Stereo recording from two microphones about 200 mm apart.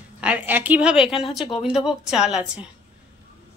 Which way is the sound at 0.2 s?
5° right (ahead or behind).